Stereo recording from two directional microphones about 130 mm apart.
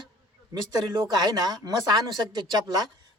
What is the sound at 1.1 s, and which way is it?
Speech, 30° right (ahead or behind).